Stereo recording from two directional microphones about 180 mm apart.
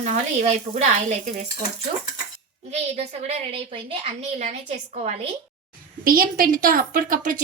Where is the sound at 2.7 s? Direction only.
40° right (ahead or behind).